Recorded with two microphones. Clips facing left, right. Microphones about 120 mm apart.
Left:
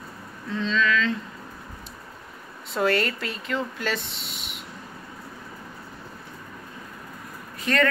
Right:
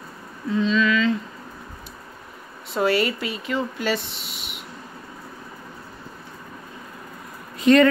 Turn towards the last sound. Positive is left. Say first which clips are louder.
# right 9 dB
turn(degrees=-20)  # may be behind; listen again after turning